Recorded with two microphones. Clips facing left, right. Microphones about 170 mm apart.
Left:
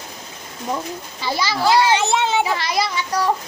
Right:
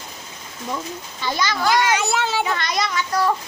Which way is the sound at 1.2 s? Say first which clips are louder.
Left 1 dB; 10° left (ahead or behind).